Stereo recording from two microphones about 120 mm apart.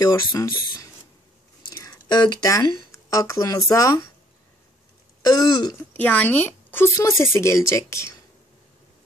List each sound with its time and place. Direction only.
0.0 s speech: 35° left (ahead or behind)
1.6 s chewing: 30° left (ahead or behind)
2.9 s speech: 25° left (ahead or behind)
5.2 s speech: 35° left (ahead or behind)
5.8 s speech: 10° left (ahead or behind)